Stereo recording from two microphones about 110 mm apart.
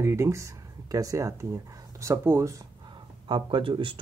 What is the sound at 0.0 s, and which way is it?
Speech, 25° right (ahead or behind).